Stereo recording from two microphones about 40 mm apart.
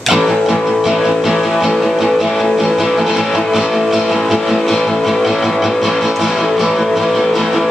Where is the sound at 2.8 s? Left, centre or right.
Centre.